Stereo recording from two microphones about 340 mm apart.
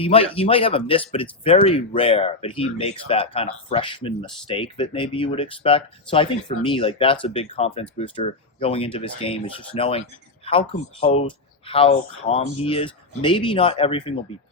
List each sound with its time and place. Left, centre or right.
0.0 s speech: centre